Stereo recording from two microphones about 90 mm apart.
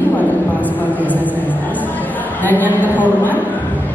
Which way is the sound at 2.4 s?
20° left (ahead or behind).